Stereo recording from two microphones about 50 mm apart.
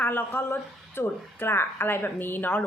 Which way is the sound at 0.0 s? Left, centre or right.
Left.